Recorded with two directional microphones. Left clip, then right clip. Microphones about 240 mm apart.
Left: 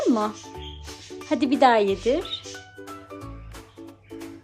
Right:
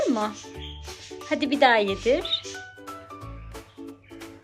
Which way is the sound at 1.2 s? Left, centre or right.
Centre.